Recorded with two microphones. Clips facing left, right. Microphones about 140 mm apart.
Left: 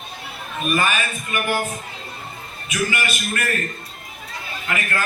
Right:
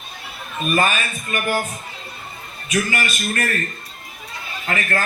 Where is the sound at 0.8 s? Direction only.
35° right (ahead or behind).